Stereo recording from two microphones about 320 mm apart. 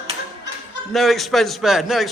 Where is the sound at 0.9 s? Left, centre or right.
Centre.